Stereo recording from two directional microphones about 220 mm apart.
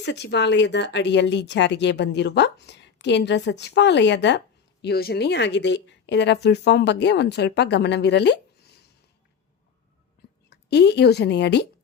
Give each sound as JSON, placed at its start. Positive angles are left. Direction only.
{"t": 0.0, "sound": "speech", "side_deg": 50}
{"t": 10.5, "sound": "speech", "side_deg": 50}